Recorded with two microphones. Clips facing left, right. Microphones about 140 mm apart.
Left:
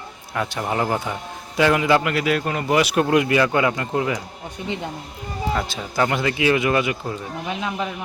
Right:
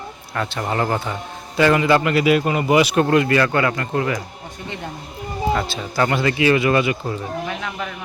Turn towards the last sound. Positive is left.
turn(degrees=20)  # may be behind; listen again after turning